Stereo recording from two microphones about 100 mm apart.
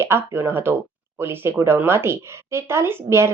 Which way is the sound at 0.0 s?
25° right (ahead or behind).